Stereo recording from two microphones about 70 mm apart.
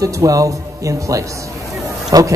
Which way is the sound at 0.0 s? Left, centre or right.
Right.